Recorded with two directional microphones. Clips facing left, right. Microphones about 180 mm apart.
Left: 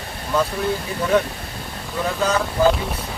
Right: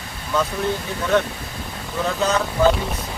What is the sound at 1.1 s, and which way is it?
Speech, 10° left (ahead or behind).